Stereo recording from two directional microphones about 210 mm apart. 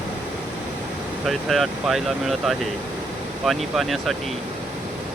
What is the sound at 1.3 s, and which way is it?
Speech, centre (ahead or behind).